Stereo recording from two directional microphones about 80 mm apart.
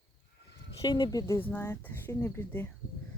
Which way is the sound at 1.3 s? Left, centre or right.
Left.